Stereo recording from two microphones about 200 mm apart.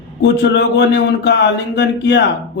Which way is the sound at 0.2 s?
60° left (ahead or behind).